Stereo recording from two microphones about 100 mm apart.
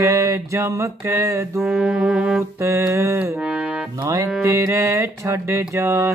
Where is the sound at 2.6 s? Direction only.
30° right (ahead or behind).